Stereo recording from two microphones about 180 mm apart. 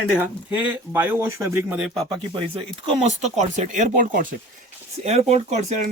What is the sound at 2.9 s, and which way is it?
Speech, 40° right (ahead or behind).